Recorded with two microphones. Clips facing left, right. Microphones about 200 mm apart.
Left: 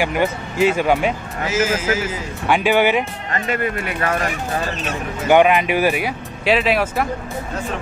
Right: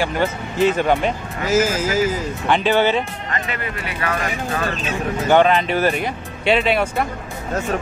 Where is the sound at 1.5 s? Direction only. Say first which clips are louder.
Right 3 dB; 40° right (ahead or behind).